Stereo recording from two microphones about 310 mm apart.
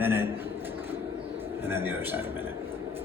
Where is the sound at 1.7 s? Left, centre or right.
Centre.